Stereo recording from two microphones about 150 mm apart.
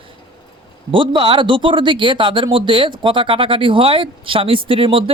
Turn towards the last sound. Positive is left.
turn(degrees=-35)  # may be behind; listen again after turning